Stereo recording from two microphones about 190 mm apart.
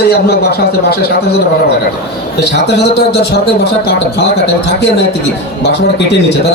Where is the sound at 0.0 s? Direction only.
55° left (ahead or behind).